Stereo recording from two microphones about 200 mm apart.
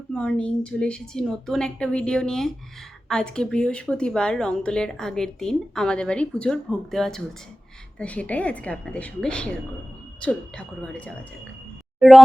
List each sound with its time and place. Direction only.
0.1 s a woman's voice: 5° left (ahead or behind)